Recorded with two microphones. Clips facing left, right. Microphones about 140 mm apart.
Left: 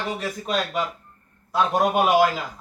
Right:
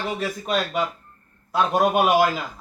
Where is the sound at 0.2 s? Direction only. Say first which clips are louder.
Right 1 dB; centre (ahead or behind).